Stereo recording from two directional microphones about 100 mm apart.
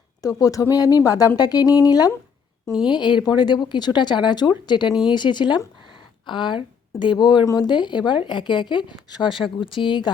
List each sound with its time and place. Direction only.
0.2 s speech: 35° left (ahead or behind)
2.9 s speech: 50° left (ahead or behind)
9.6 s speech: 55° left (ahead or behind)